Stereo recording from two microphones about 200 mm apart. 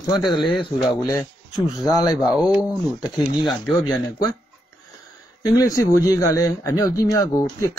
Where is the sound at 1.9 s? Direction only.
20° left (ahead or behind).